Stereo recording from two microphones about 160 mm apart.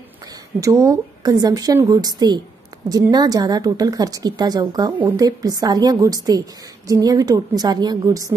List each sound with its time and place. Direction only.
0.6 s a woman's voice: 20° right (ahead or behind)